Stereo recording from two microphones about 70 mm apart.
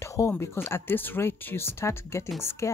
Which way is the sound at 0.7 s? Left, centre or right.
Left.